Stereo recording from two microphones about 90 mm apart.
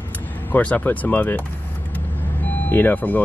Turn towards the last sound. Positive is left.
turn(degrees=20)  # may be behind; listen again after turning